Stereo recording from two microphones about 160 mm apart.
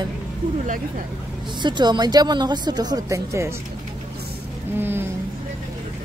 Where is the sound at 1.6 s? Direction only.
30° right (ahead or behind).